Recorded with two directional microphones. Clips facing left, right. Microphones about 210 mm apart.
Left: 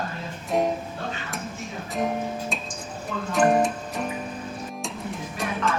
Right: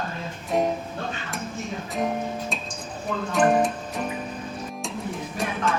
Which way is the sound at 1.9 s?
Centre (ahead or behind).